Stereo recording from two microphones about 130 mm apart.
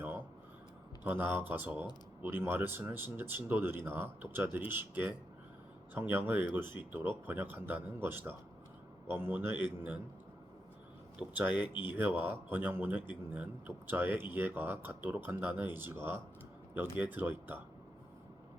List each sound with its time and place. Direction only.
1.0 s speech: 15° right (ahead or behind)
11.2 s speech: 10° right (ahead or behind)